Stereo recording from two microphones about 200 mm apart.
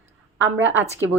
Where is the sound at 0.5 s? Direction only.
70° right (ahead or behind).